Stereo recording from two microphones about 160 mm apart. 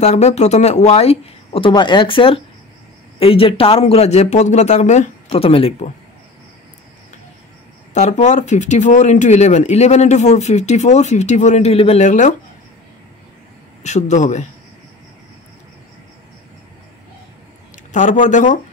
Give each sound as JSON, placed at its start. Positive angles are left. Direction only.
{"t": 0.0, "sound": "speech", "side_deg": 45}
{"t": 7.9, "sound": "speech", "side_deg": 45}
{"t": 13.8, "sound": "speech", "side_deg": 45}
{"t": 17.9, "sound": "speech", "side_deg": 50}